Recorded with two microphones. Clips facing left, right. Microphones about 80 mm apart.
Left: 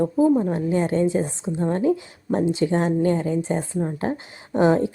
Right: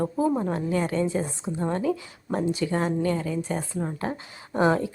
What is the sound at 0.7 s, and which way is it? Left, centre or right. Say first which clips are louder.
A woman's voice: left 5 dB; left.